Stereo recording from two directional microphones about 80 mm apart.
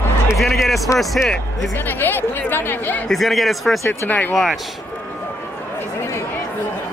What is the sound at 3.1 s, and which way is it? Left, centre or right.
Speech, centre.